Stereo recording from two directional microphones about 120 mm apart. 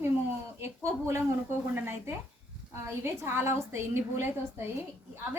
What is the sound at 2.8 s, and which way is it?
A woman's voice, 20° right (ahead or behind).